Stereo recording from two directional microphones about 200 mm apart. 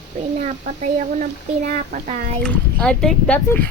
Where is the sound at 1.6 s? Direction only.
35° right (ahead or behind).